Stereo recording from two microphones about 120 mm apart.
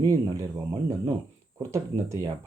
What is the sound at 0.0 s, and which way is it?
Speech, 30° right (ahead or behind).